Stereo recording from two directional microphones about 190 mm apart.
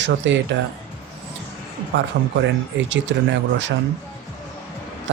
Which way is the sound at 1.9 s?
85° right.